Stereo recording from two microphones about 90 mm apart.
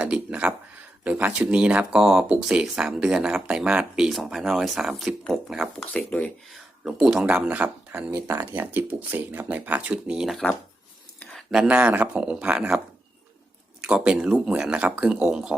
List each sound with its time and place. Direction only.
0.0 s speech: 15° right (ahead or behind)
5.7 s speech: 15° left (ahead or behind)
6.8 s speech: 5° right (ahead or behind)
8.1 s speech: 35° right (ahead or behind)
8.4 s speech: 20° right (ahead or behind); by 10.4 s 5° right (ahead or behind)
11.5 s speech: 10° right (ahead or behind)
13.8 s speech: 10° right (ahead or behind)